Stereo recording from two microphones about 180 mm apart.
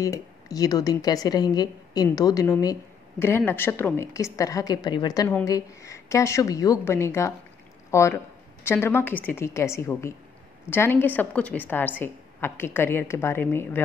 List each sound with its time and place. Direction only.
0.0 s speech: 20° left (ahead or behind)